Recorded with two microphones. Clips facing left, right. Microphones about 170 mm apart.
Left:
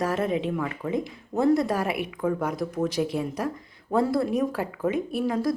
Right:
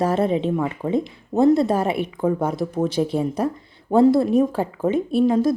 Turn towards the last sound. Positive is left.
turn(degrees=-25)  # may be behind; listen again after turning